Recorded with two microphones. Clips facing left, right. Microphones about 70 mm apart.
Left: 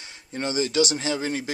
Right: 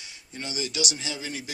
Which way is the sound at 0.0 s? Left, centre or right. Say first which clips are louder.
Left 8 dB; left.